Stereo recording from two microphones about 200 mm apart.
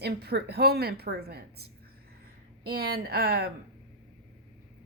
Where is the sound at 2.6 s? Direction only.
50° right (ahead or behind).